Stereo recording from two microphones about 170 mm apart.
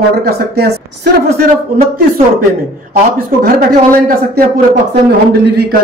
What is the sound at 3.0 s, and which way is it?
Speech, 55° right (ahead or behind).